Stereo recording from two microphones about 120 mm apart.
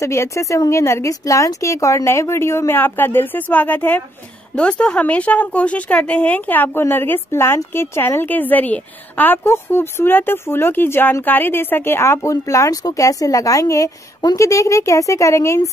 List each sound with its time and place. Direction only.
0.0 s a woman's voice: 25° left (ahead or behind)